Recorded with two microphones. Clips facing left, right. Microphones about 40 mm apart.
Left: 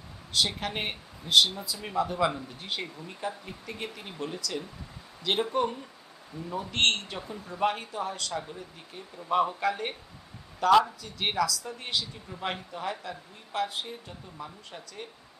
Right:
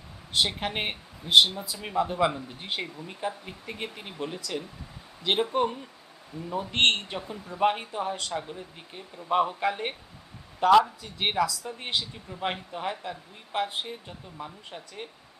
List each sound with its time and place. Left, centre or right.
0.3 s speech: right
7.2 s speech: centre
7.6 s speech: right
12.3 s speech: centre
12.7 s speech: right